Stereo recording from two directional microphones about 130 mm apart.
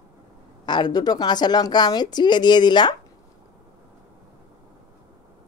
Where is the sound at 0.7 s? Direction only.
35° left (ahead or behind).